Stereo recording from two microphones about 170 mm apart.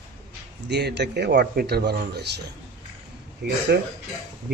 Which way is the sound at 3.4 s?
75° right (ahead or behind).